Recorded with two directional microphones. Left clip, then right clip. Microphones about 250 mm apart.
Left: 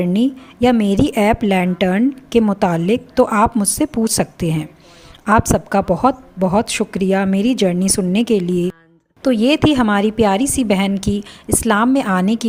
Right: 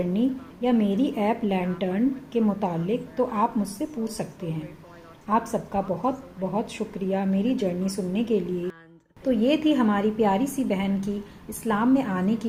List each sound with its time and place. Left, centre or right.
0.0 s a woman's voice: left